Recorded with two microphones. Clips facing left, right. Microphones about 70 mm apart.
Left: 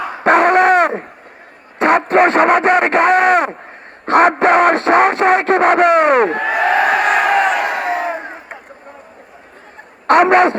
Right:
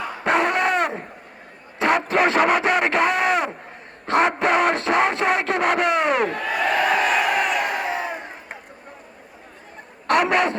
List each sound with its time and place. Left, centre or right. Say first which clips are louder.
0.3 s dog: left 9 dB; left
1.8 s a sound: left 7 dB; left
4.0 s music: left 8 dB; left
6.5 s crowd: left 6 dB; left
7.6 s crowd: left 5 dB; left
7.9 s crowd: left 7 dB; left
10.1 s a sound: left 9 dB; left